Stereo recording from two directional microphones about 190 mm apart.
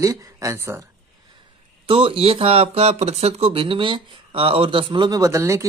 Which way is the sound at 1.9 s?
30° right (ahead or behind).